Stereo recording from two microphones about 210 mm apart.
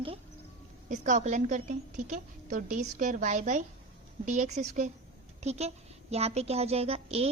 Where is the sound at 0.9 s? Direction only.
35° right (ahead or behind).